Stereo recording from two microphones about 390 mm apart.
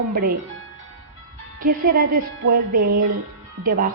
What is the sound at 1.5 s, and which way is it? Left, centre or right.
Speech, right.